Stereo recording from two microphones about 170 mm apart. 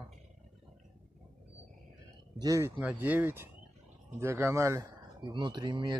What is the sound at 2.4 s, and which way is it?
Speech, 15° right (ahead or behind).